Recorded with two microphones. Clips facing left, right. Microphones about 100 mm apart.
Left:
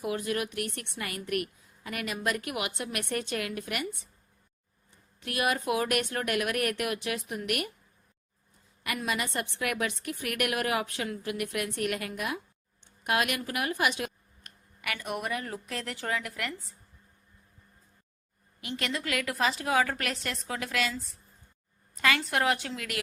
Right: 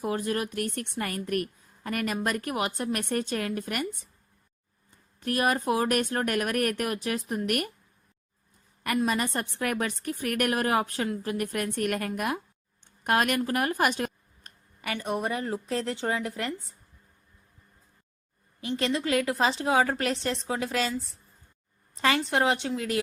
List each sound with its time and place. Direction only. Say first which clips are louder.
0.0 s a woman's voice: right 2 dB; 35° right (ahead or behind)
5.2 s a woman's voice: right 3 dB; 40° right (ahead or behind)
9.0 s a woman's voice: right 5 dB; 40° right (ahead or behind)
18.6 s a woman's voice: right 6 dB; 30° right (ahead or behind)
21.9 s a woman's voice: right 3 dB; 30° right (ahead or behind)